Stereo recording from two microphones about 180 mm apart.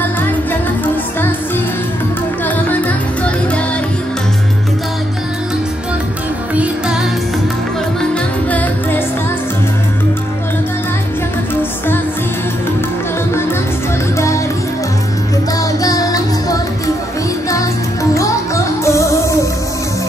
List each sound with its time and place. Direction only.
6.5 s music: 10° right (ahead or behind)
8.1 s music: 10° left (ahead or behind)
15.8 s music: 20° left (ahead or behind)
18.1 s music: 15° left (ahead or behind)